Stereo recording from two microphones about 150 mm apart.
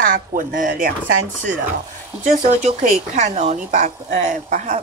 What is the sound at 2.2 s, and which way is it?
Speech, 55° right (ahead or behind).